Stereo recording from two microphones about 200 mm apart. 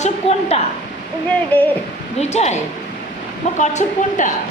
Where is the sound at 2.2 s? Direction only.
35° left (ahead or behind).